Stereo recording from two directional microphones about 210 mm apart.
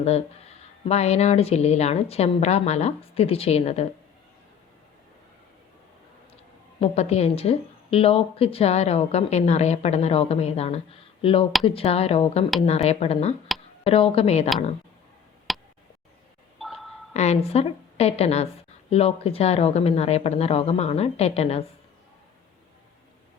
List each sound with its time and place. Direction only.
0.9 s speech: 30° left (ahead or behind)
6.7 s speech: 30° left (ahead or behind)
15.5 s tick: centre (ahead or behind)
16.6 s a sound: centre (ahead or behind)
17.2 s speech: 30° left (ahead or behind)